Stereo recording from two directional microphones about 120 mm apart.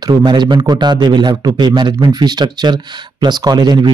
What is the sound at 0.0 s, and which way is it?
Speech, 40° right (ahead or behind).